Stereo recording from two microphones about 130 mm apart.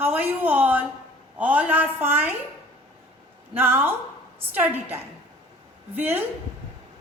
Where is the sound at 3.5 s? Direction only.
15° right (ahead or behind).